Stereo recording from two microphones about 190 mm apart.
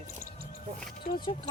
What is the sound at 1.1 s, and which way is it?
Speech, 25° left (ahead or behind).